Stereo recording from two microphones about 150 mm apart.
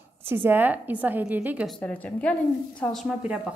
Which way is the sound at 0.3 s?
15° right (ahead or behind).